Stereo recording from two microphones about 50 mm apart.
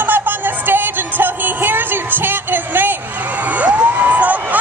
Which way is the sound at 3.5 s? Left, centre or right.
Right.